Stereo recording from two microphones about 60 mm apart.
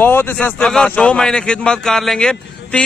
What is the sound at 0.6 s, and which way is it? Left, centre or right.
A man's voice, centre.